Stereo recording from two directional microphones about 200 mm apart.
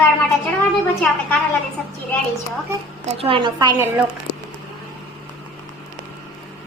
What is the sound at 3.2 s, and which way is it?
Speech, 25° right (ahead or behind).